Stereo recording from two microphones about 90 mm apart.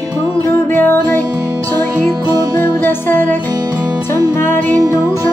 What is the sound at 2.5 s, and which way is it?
Music, 25° left (ahead or behind).